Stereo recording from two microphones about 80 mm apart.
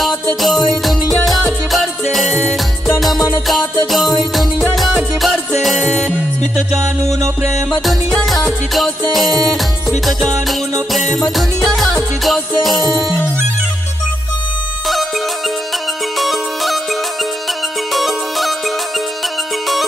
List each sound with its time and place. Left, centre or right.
0.4 s music: centre
7.1 s music: right
7.8 s music: centre
16.2 s music: centre
17.9 s music: centre